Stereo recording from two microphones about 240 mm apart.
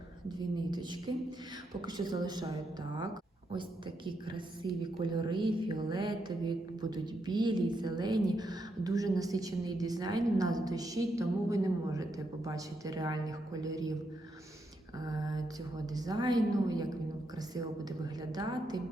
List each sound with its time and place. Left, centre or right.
0.3 s a woman's voice: centre
4.0 s a woman's voice: centre
15.0 s a woman's voice: centre